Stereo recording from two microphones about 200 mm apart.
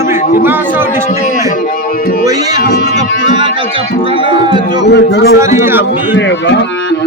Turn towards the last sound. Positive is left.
turn(degrees=55)  # may be behind; listen again after turning